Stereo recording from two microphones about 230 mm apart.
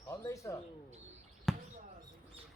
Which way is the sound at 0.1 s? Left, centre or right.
Centre.